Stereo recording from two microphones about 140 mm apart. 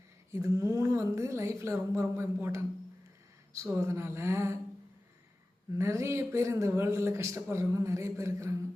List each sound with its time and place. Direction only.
0.3 s a woman's voice: 20° right (ahead or behind)
5.7 s a woman's voice: 20° right (ahead or behind)